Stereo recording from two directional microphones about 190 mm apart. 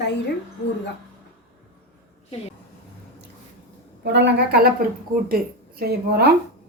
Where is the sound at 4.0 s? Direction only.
65° right (ahead or behind).